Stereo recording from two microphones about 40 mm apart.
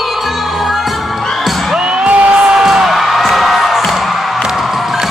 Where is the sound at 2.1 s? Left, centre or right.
Right.